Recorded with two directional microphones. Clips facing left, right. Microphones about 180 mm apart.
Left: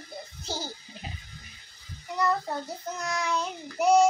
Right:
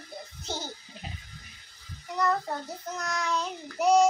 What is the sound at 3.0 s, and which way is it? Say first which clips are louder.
Speech: left 1 dB; centre (ahead or behind).